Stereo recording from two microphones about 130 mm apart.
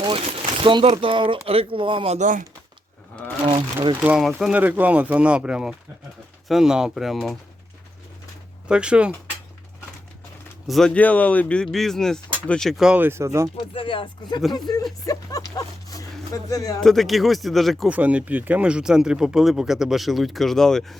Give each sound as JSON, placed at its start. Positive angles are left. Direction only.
{"t": 0.6, "sound": "speech", "side_deg": -40}
{"t": 2.1, "sound": "speech", "side_deg": -75}
{"t": 4.0, "sound": "speech", "side_deg": -10}
{"t": 8.6, "sound": "speech", "side_deg": -5}
{"t": 10.7, "sound": "speech", "side_deg": 5}
{"t": 13.6, "sound": "speech", "side_deg": 40}
{"t": 16.8, "sound": "speech", "side_deg": 0}
{"t": 17.8, "sound": "speech", "side_deg": -10}